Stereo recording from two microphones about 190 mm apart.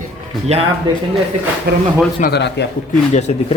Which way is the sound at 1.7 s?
55° right (ahead or behind).